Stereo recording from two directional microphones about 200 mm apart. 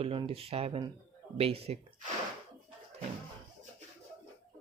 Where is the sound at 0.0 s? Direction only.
30° right (ahead or behind).